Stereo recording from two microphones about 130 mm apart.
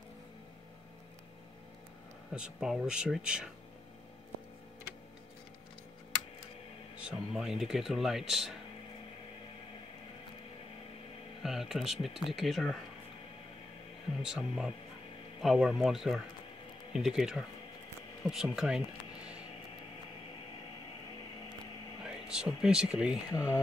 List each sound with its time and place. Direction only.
2.3 s speech: 5° right (ahead or behind)
7.1 s speech: 5° right (ahead or behind)
11.4 s speech: 5° right (ahead or behind)
14.2 s speech: 5° right (ahead or behind)
22.0 s speech: 5° right (ahead or behind)
23.3 s speech: 25° left (ahead or behind)